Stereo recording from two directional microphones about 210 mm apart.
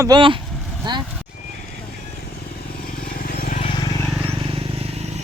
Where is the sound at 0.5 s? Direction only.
Centre (ahead or behind).